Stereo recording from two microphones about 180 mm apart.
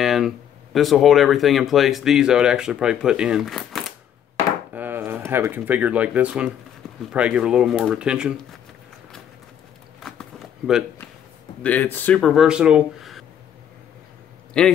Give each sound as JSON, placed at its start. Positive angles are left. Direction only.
{"t": 0.0, "sound": "a sound", "side_deg": 0}
{"t": 0.7, "sound": "speech", "side_deg": 0}
{"t": 4.7, "sound": "speech", "side_deg": -10}
{"t": 10.0, "sound": "walk", "side_deg": 0}
{"t": 11.6, "sound": "speech", "side_deg": 10}
{"t": 14.5, "sound": "speech", "side_deg": 5}